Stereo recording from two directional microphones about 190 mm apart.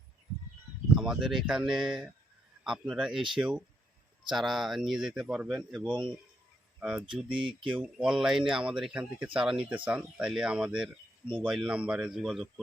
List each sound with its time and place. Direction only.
0.9 s speech: 5° right (ahead or behind)
7.3 s speech: 25° right (ahead or behind)
7.8 s speech: 5° right (ahead or behind)